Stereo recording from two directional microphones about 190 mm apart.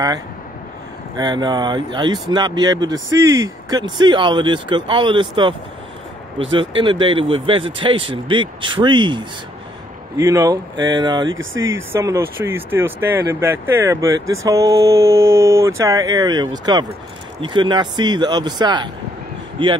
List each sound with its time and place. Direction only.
1.1 s speech: 25° right (ahead or behind)
6.5 s speech: 25° right (ahead or behind)
11.2 s speech: 90° right
11.9 s speech: 15° right (ahead or behind)